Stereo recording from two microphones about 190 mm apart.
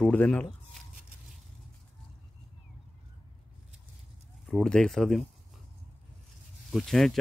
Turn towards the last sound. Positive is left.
turn(degrees=0)  # may be behind; listen again after turning